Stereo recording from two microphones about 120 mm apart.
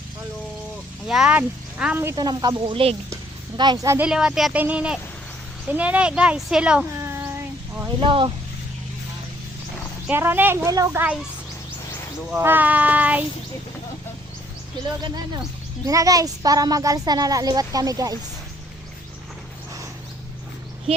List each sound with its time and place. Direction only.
1.0 s speech: 5° right (ahead or behind)
2.1 s speech: 35° right (ahead or behind)
4.0 s speech: 10° right (ahead or behind)
7.0 s child singing: 20° right (ahead or behind)
8.0 s speech: 45° right (ahead or behind)
10.1 s a child's voice: 15° right (ahead or behind)
12.4 s speech: 15° right (ahead or behind)
15.9 s speech: 30° right (ahead or behind)